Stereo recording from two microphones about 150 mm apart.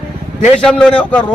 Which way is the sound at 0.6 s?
5° left (ahead or behind).